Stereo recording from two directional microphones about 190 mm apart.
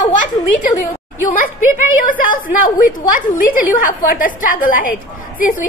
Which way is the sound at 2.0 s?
45° left (ahead or behind).